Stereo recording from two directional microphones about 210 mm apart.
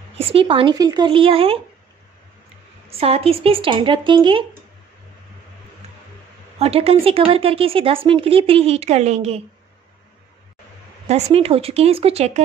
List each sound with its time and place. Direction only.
0.2 s speech: 25° right (ahead or behind)
3.0 s speech: 25° right (ahead or behind)
6.6 s speech: 30° right (ahead or behind)
11.1 s speech: 30° right (ahead or behind)